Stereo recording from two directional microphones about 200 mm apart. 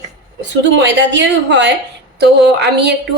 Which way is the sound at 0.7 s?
65° right (ahead or behind).